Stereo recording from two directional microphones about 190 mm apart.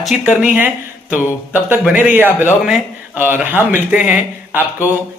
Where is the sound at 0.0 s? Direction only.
5° right (ahead or behind).